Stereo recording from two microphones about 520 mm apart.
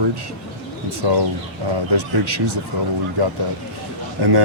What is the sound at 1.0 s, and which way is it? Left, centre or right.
Speech, right.